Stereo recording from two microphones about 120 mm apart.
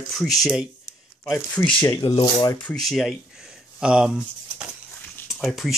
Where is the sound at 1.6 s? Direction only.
15° left (ahead or behind).